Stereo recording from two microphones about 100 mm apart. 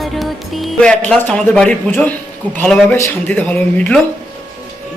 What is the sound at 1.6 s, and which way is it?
Speech, 10° left (ahead or behind).